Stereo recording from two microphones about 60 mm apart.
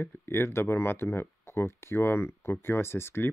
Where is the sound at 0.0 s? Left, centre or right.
Left.